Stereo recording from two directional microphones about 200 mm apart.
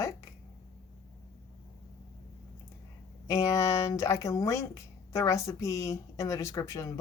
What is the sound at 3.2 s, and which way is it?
Speech, 15° left (ahead or behind).